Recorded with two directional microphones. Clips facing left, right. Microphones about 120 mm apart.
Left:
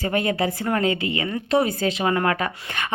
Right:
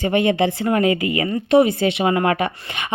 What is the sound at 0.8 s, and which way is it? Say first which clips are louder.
Speech: right 4 dB; 30° left (ahead or behind).